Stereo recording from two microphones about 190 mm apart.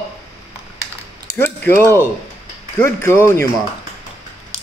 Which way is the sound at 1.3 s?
10° left (ahead or behind).